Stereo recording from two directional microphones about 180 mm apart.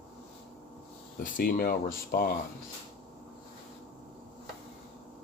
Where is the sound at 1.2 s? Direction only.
50° left (ahead or behind).